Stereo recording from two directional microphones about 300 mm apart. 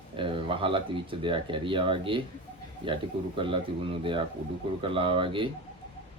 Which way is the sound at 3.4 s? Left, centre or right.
Centre.